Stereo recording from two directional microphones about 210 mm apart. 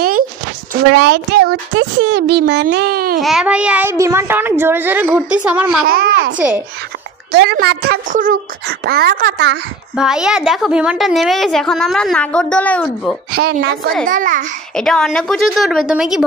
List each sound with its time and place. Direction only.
0.9 s speech: 50° right (ahead or behind)
3.2 s a child's voice: centre (ahead or behind)
5.9 s a child's voice: 45° right (ahead or behind)
6.3 s a child's voice: 5° right (ahead or behind)
7.3 s speech: 50° right (ahead or behind)
9.9 s a woman's voice: 5° right (ahead or behind)
14.0 s a child's voice: 40° right (ahead or behind)
14.8 s a woman's voice: 5° left (ahead or behind)